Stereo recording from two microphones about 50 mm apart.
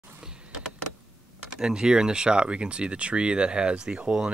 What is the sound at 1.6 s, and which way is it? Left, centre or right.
Speech, centre.